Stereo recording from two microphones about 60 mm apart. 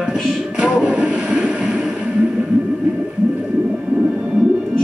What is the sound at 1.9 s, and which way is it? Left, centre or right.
Whale vocalization, right.